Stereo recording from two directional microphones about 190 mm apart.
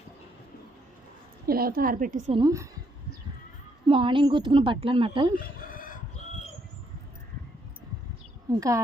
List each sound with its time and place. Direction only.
1.5 s a woman's voice: 50° right (ahead or behind)
2.3 s a woman's voice: 20° right (ahead or behind)
3.8 s a woman's voice: 25° right (ahead or behind)
5.5 s chicken: 50° left (ahead or behind)
8.4 s speech: 15° right (ahead or behind)